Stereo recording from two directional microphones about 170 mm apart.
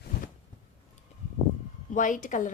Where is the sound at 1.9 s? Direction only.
50° left (ahead or behind).